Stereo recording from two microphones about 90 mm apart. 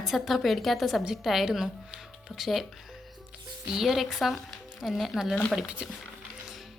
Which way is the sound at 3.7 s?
5° right (ahead or behind).